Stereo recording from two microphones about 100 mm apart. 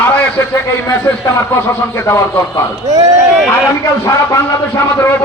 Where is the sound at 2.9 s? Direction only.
35° right (ahead or behind).